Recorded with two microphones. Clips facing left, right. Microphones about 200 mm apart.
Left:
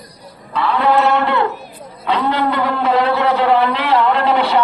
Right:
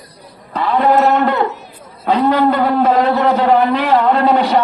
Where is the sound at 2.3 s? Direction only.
45° right (ahead or behind).